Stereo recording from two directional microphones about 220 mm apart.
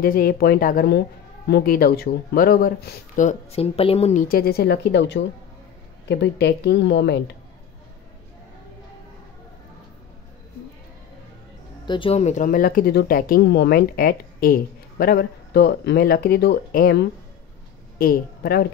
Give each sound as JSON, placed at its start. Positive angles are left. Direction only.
{"t": 0.0, "sound": "speech", "side_deg": 40}
{"t": 3.2, "sound": "speech", "side_deg": 30}
{"t": 11.8, "sound": "a woman's voice", "side_deg": 20}